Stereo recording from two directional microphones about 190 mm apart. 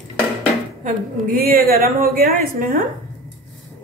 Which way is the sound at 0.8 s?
50° right (ahead or behind).